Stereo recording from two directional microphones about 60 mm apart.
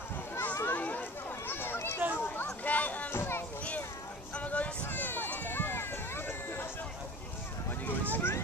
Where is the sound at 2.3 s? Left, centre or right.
Left.